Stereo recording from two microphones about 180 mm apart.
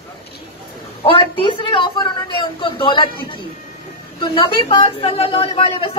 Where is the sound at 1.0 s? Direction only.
30° left (ahead or behind).